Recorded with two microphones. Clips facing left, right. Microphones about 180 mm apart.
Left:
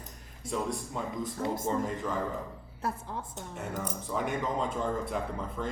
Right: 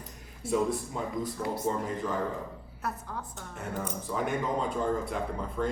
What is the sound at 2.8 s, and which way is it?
Speech, 25° left (ahead or behind).